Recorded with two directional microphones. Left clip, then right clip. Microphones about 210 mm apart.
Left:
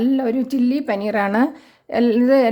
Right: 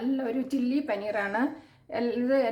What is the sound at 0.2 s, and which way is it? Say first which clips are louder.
A woman's voice: left 10 dB; 50° left (ahead or behind).